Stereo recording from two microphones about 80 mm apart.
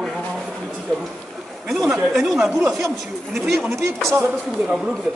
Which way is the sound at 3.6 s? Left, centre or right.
Right.